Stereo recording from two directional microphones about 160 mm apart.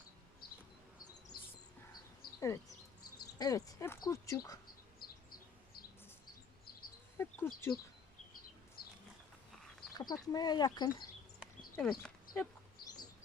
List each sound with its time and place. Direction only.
2.4 s speech: 20° left (ahead or behind)
7.2 s speech: 15° left (ahead or behind)
9.9 s speech: 25° left (ahead or behind)
11.4 s a sound: 5° right (ahead or behind)
11.8 s speech: 5° left (ahead or behind)